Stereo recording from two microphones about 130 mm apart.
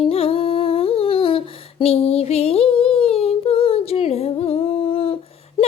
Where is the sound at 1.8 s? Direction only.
50° left (ahead or behind).